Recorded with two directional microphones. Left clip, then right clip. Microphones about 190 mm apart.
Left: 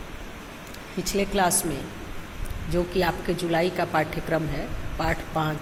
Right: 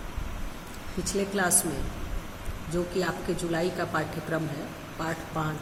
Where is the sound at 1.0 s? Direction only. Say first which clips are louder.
Left 4 dB; 10° left (ahead or behind).